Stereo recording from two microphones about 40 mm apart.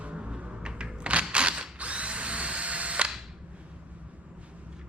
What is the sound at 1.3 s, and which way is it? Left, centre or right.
Mechanisms, right.